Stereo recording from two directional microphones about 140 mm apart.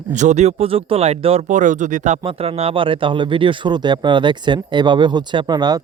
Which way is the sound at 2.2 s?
45° right (ahead or behind).